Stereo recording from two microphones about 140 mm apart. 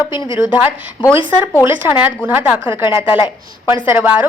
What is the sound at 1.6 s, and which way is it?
A woman's voice, 15° right (ahead or behind).